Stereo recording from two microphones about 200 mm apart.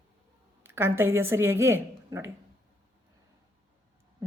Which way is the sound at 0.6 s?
10° right (ahead or behind).